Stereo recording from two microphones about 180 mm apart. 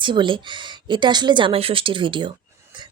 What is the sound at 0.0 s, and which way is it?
Speech, 25° right (ahead or behind).